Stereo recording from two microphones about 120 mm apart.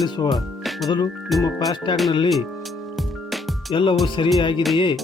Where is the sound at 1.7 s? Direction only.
40° left (ahead or behind).